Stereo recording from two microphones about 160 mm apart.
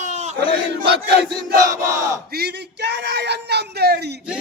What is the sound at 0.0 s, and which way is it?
Battle cry, 45° right (ahead or behind).